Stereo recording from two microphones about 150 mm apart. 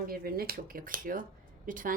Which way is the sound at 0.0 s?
80° right.